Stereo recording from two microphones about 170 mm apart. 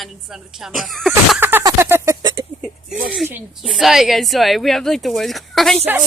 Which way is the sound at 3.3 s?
5° right (ahead or behind).